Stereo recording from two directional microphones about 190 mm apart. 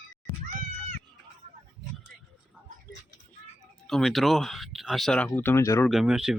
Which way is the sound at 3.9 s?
Centre (ahead or behind).